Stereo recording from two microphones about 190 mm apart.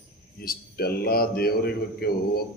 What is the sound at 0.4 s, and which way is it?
A man's voice, 55° left (ahead or behind).